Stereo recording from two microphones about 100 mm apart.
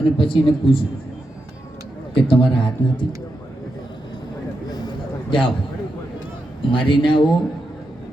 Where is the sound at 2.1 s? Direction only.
60° left (ahead or behind).